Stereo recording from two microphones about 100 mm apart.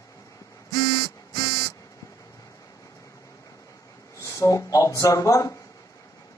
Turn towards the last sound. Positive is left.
turn(degrees=35)  # may be behind; listen again after turning